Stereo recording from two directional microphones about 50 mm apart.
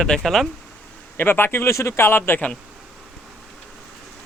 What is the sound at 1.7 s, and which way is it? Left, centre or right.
Speech, left.